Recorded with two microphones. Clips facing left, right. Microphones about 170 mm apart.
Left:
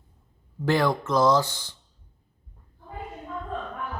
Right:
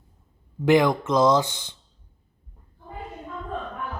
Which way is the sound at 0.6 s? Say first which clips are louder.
Right 5 dB; 20° right (ahead or behind).